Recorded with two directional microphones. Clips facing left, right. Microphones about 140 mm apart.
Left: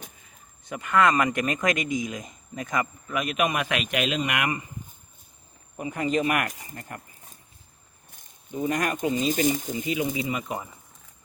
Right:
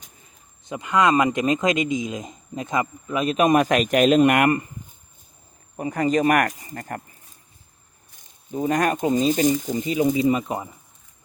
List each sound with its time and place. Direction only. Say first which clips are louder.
0.6 s a man's voice: right 2 dB; 20° right (ahead or behind); by 4.6 s 50° right (ahead or behind)
5.7 s speech: right 5 dB; 40° right (ahead or behind)
8.5 s speech: right 5 dB; 35° right (ahead or behind)
9.1 s speech: right 4 dB; 45° right (ahead or behind)